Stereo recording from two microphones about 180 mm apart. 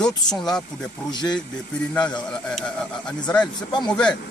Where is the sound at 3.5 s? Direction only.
25° left (ahead or behind).